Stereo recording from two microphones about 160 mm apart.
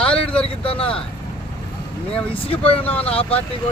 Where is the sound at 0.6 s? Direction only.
35° left (ahead or behind).